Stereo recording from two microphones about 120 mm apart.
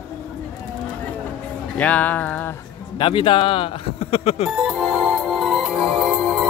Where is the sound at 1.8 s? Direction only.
10° left (ahead or behind).